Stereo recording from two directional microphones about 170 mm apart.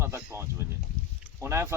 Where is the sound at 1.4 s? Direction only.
15° right (ahead or behind).